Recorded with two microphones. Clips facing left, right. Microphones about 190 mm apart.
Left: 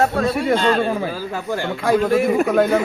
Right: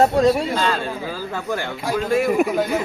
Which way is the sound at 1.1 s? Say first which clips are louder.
Left 1 dB; 15° left (ahead or behind).